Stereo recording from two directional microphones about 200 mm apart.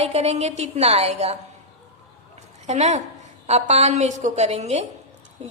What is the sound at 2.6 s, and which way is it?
A woman's voice, 35° right (ahead or behind).